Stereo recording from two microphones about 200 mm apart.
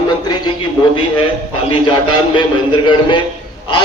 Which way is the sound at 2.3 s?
25° left (ahead or behind).